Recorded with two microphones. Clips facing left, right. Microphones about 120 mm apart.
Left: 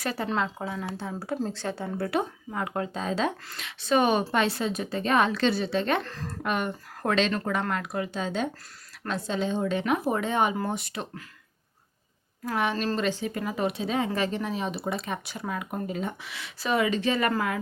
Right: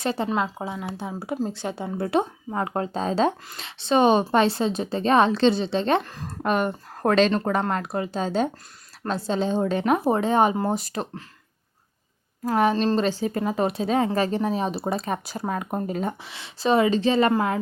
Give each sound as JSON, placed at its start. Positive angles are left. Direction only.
{"t": 0.0, "sound": "a woman's voice", "side_deg": -25}
{"t": 6.0, "sound": "speech", "side_deg": -15}
{"t": 6.4, "sound": "speech", "side_deg": -35}
{"t": 12.5, "sound": "speech", "side_deg": -35}